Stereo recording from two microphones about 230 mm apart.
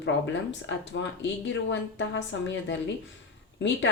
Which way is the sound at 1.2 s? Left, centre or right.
Left.